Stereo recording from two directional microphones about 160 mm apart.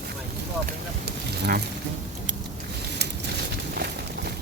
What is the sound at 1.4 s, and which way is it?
Speech, 75° right (ahead or behind).